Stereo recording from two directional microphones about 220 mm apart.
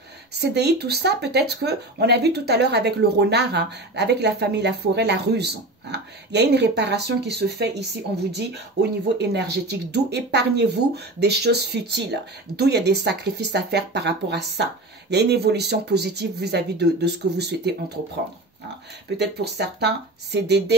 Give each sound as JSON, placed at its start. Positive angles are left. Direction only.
{"t": 0.3, "sound": "speech", "side_deg": -50}
{"t": 19.0, "sound": "speech", "side_deg": -50}